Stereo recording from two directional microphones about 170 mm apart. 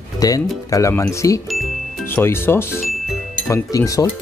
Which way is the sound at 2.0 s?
15° left (ahead or behind).